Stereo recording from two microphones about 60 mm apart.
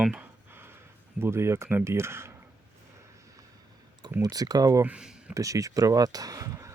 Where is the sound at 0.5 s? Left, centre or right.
Right.